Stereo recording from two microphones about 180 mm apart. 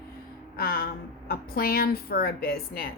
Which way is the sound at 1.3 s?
55° left (ahead or behind).